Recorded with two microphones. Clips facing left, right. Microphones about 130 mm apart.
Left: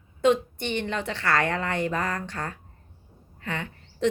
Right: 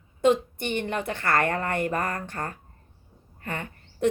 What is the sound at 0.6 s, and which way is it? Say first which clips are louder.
A woman's voice: even; 50° right (ahead or behind).